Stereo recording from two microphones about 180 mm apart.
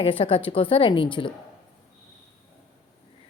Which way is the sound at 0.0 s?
30° left (ahead or behind).